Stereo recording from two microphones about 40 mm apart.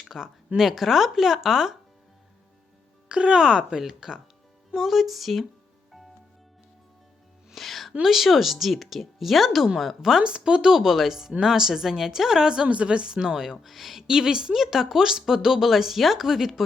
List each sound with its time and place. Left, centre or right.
0.0 s speech: centre
3.1 s speech: right; by 5.5 s centre
7.5 s music: centre
8.0 s speech: centre
12.6 s speech: right; by 14.0 s centre
14.1 s speech: centre